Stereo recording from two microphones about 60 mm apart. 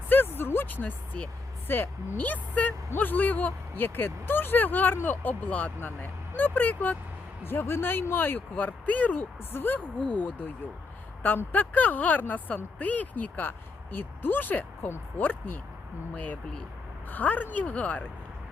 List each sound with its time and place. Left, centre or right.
0.1 s speech: left
7.4 s speech: left